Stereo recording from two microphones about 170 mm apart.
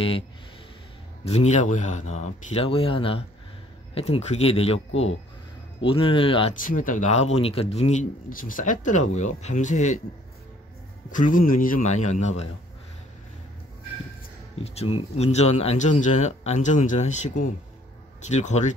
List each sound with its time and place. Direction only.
1.2 s a man's voice: 40° left (ahead or behind)
6.5 s speech: 50° left (ahead or behind)
11.1 s speech: 50° left (ahead or behind)
14.6 s speech: 40° left (ahead or behind)